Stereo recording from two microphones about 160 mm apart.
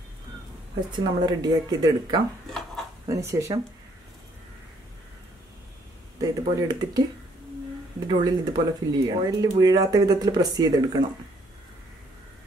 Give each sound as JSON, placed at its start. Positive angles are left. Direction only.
{"t": 0.7, "sound": "speech", "side_deg": -25}
{"t": 6.2, "sound": "speech", "side_deg": -25}
{"t": 8.1, "sound": "speech", "side_deg": -25}